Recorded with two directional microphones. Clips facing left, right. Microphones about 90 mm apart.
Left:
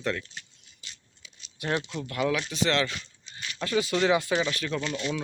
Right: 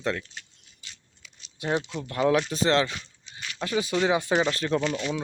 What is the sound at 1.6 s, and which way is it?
A man's voice, 25° right (ahead or behind).